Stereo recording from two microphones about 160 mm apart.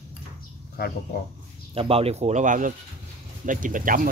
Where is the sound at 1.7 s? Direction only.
35° right (ahead or behind).